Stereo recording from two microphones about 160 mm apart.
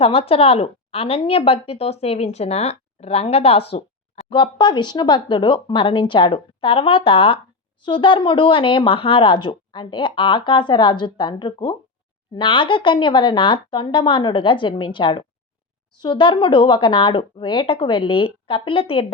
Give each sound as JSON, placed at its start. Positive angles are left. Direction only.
{"t": 0.0, "sound": "speech", "side_deg": 35}